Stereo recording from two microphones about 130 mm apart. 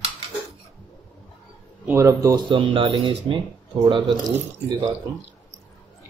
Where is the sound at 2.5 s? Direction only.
40° right (ahead or behind).